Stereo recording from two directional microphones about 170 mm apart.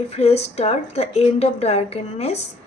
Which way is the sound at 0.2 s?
40° left (ahead or behind).